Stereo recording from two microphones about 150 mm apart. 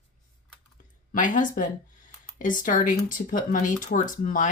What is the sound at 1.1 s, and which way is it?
Speech, 60° left (ahead or behind).